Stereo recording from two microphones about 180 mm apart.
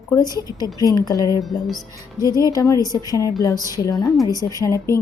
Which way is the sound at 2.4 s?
20° left (ahead or behind).